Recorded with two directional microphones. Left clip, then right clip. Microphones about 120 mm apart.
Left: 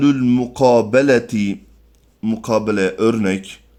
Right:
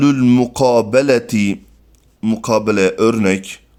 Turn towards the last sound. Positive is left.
turn(degrees=-40)  # may be behind; listen again after turning